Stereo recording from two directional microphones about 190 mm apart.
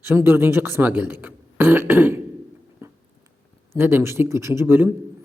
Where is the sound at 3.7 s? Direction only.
10° right (ahead or behind).